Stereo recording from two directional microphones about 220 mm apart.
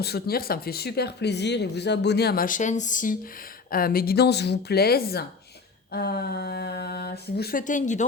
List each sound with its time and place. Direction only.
0.0 s speech: 45° left (ahead or behind)